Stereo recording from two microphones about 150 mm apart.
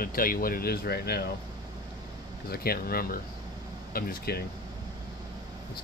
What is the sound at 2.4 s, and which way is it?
Speech, 90° left.